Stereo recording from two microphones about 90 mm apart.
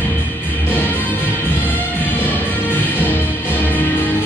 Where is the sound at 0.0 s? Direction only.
20° left (ahead or behind).